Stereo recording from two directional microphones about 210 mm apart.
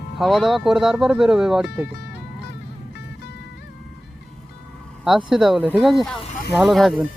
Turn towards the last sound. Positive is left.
turn(degrees=0)  # may be behind; listen again after turning